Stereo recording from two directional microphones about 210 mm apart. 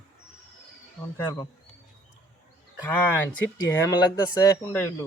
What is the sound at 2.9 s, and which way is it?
Speech, 10° left (ahead or behind).